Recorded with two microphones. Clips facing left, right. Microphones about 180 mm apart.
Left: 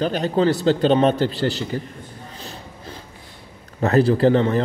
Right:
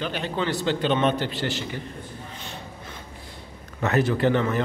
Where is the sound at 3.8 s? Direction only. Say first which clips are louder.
Left 6 dB; 35° left (ahead or behind).